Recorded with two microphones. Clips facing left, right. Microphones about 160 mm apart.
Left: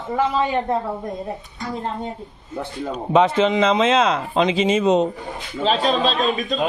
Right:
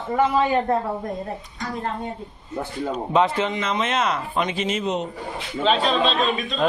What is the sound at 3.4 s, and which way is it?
Speech, 90° left.